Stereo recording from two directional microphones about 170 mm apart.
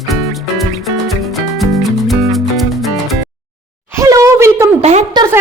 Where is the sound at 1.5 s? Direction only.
Centre (ahead or behind).